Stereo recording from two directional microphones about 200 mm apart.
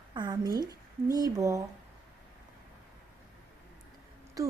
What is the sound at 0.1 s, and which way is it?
Speech, 20° right (ahead or behind).